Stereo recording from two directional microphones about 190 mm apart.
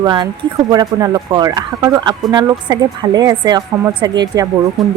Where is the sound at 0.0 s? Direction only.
20° right (ahead or behind).